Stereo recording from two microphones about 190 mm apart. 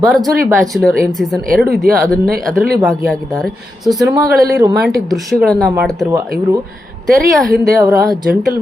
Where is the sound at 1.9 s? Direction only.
50° right (ahead or behind).